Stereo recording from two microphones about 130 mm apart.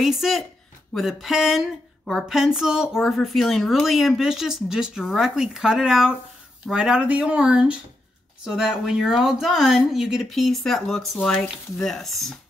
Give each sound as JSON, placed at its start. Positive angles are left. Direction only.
{"t": 0.0, "sound": "speech", "side_deg": 0}